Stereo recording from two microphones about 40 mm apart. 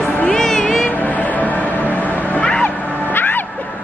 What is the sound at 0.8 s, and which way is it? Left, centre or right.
Music, left.